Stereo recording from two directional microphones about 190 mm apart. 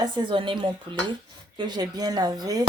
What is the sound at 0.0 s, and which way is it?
Speech, 25° right (ahead or behind).